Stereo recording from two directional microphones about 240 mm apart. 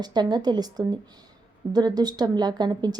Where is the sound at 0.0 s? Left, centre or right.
Centre.